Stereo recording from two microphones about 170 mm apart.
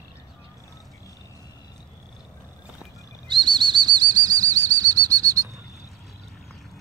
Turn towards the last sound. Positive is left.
turn(degrees=-20)  # may be behind; listen again after turning